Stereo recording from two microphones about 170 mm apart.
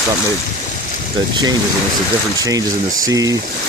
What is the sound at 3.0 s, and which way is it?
Speech, 20° right (ahead or behind).